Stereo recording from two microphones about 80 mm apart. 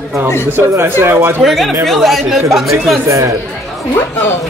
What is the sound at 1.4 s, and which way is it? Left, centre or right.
Speech, centre.